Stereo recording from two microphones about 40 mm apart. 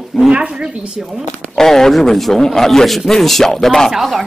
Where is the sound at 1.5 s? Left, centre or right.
Centre.